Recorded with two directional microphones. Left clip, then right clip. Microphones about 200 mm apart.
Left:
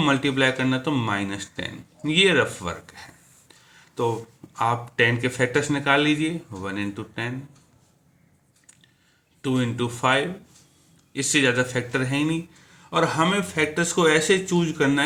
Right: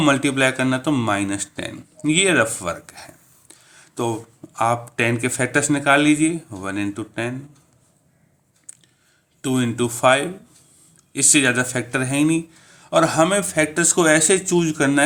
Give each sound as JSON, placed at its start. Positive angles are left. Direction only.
{"t": 0.0, "sound": "speech", "side_deg": -45}
{"t": 3.5, "sound": "a sound", "side_deg": -45}
{"t": 4.5, "sound": "speech", "side_deg": -45}
{"t": 9.4, "sound": "speech", "side_deg": -45}